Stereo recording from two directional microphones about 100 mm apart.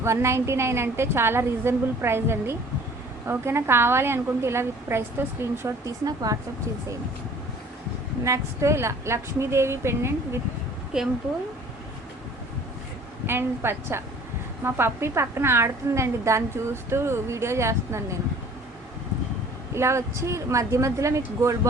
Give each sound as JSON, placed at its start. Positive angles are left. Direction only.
{"t": 0.0, "sound": "a woman's voice", "side_deg": -30}
{"t": 8.2, "sound": "a woman's voice", "side_deg": -30}
{"t": 10.9, "sound": "speech", "side_deg": -5}
{"t": 13.2, "sound": "a woman's voice", "side_deg": -25}
{"t": 19.7, "sound": "a woman's voice", "side_deg": -30}